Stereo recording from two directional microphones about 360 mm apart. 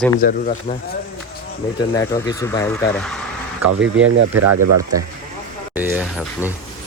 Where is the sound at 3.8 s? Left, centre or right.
Right.